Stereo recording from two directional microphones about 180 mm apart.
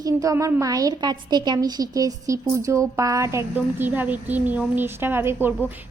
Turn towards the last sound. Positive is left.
turn(degrees=-10)  # may be behind; listen again after turning